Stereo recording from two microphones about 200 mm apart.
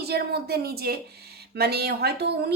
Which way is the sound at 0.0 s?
50° right (ahead or behind).